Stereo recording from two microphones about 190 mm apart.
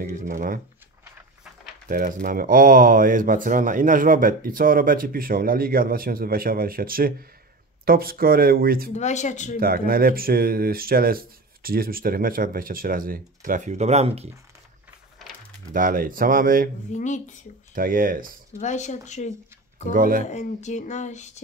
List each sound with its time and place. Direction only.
0.2 s speech: 45° right (ahead or behind)
1.9 s speech: 45° right (ahead or behind)
8.9 s speech: 40° left (ahead or behind)
9.6 s speech: 50° right (ahead or behind); by 14.3 s 35° right (ahead or behind)
15.7 s speech: 45° right (ahead or behind)
16.9 s speech: 40° left (ahead or behind)
17.7 s speech: 45° right (ahead or behind)
18.6 s speech: 40° left (ahead or behind)
19.9 s speech: 50° right (ahead or behind)
20.2 s speech: 40° left (ahead or behind)